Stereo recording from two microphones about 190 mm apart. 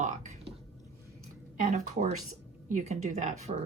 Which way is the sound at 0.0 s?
40° right (ahead or behind).